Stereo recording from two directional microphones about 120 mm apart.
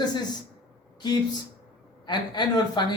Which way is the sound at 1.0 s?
35° left (ahead or behind).